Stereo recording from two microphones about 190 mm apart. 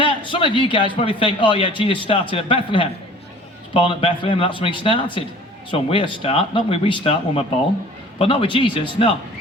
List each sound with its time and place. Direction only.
0.0 s a man's voice: 25° left (ahead or behind)